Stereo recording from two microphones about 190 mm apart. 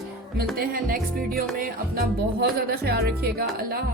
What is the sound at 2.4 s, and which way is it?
Speech, 55° right (ahead or behind).